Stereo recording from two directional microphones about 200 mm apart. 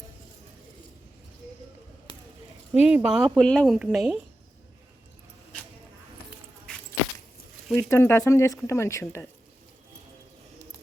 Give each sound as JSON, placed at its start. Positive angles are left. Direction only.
{"t": 2.7, "sound": "speech", "side_deg": -5}
{"t": 7.8, "sound": "speech", "side_deg": 10}